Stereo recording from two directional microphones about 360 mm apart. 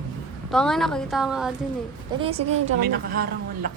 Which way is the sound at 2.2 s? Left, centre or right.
Centre.